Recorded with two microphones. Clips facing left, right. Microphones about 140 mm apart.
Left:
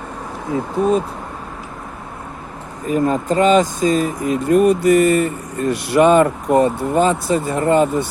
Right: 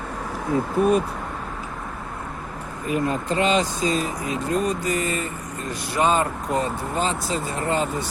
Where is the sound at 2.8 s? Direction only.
40° left (ahead or behind).